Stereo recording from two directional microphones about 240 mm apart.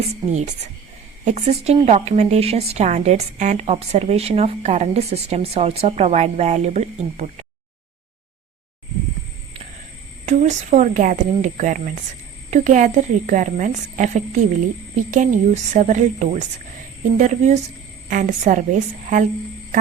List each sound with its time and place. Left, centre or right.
0.1 s a woman's voice: right
10.2 s a woman's voice: right